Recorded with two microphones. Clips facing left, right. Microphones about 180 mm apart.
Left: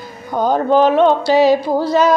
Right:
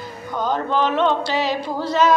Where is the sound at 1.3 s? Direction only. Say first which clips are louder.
Left 10 dB; 40° left (ahead or behind).